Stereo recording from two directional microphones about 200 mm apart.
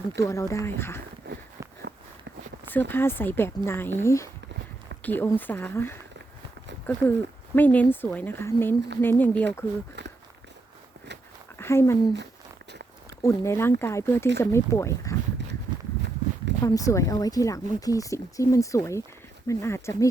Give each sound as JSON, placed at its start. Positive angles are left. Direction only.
{"t": 0.2, "sound": "speech", "side_deg": 15}
{"t": 2.9, "sound": "speech", "side_deg": 10}
{"t": 10.0, "sound": "walk", "side_deg": -60}
{"t": 11.5, "sound": "speech", "side_deg": 10}
{"t": 13.2, "sound": "speech", "side_deg": 15}
{"t": 16.6, "sound": "speech", "side_deg": 15}